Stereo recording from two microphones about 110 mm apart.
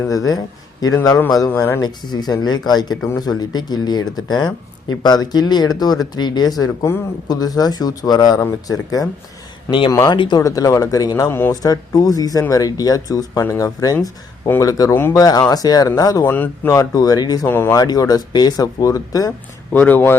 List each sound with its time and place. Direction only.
0.1 s speech: 35° left (ahead or behind)
9.6 s speech: 50° left (ahead or behind)
9.9 s speech: 30° left (ahead or behind)
10.2 s speech: 45° left (ahead or behind)
10.4 s speech: 30° left (ahead or behind)
11.3 s speech: 20° left (ahead or behind)
11.6 s speech: 35° left (ahead or behind)
14.9 s speech: 20° left (ahead or behind)
15.2 s speech: 35° left (ahead or behind)
16.2 s speech: 15° left (ahead or behind)
16.6 s speech: 30° left (ahead or behind)
17.5 s speech: 20° left (ahead or behind)
17.7 s speech: 35° left (ahead or behind)
19.7 s speech: 15° left (ahead or behind)